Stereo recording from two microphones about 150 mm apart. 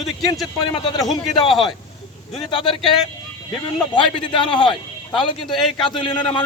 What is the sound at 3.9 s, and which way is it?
Speech, 30° left (ahead or behind).